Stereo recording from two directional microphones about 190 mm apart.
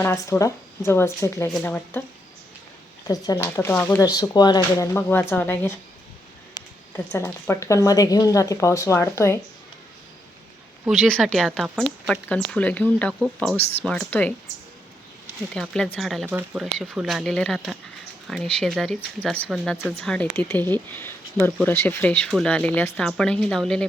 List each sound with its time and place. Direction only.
0.0 s speech: 15° left (ahead or behind)
3.1 s speech: 15° left (ahead or behind)
10.8 s speech: centre (ahead or behind)
15.5 s speech: 5° left (ahead or behind)